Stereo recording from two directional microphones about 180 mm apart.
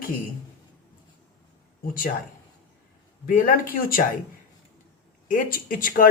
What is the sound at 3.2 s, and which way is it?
Speech, 50° left (ahead or behind).